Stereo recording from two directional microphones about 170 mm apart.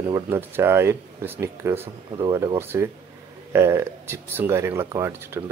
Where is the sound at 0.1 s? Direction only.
15° right (ahead or behind).